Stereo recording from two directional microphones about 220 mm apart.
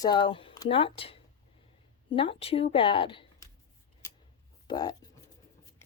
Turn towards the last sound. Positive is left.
turn(degrees=20)  # may be behind; listen again after turning